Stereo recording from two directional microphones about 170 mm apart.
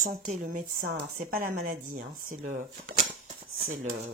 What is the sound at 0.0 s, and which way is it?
A woman's voice, 45° right (ahead or behind).